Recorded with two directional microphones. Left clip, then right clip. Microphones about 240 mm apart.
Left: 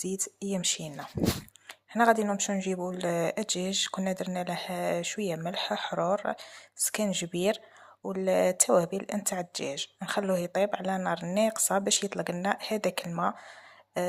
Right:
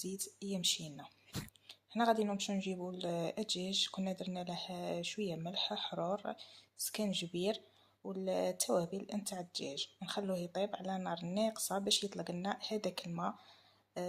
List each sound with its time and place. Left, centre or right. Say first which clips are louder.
0.5 s speech: left 4 dB; left